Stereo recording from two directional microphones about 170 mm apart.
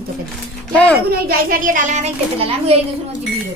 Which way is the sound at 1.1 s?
60° right (ahead or behind).